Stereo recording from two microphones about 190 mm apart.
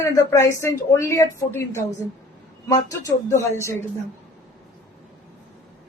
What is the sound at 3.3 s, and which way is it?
Speech, 15° left (ahead or behind).